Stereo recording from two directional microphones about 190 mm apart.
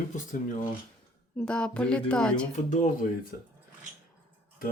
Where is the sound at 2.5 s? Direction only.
40° left (ahead or behind).